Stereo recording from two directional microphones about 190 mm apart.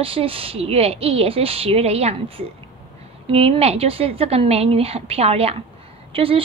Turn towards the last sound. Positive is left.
turn(degrees=-30)  # may be behind; listen again after turning